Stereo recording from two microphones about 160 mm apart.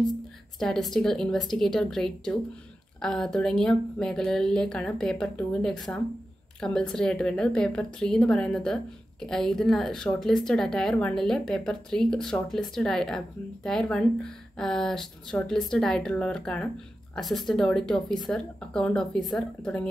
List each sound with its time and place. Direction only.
0.6 s a woman's voice: centre (ahead or behind)